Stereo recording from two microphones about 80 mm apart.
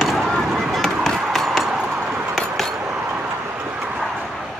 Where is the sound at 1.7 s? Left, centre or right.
Centre.